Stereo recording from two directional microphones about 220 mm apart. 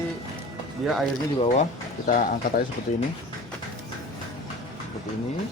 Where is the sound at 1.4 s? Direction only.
30° left (ahead or behind).